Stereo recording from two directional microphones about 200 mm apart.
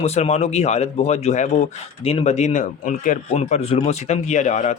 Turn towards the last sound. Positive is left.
turn(degrees=35)  # may be behind; listen again after turning